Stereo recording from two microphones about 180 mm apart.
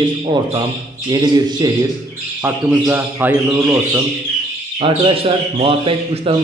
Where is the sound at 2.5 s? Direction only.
10° right (ahead or behind).